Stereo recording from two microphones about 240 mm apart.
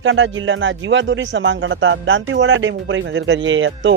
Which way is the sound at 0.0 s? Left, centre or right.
Right.